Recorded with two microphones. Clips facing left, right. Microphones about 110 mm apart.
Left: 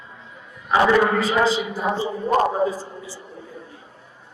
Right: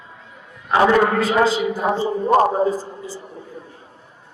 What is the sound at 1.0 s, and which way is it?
Speech, 50° right (ahead or behind).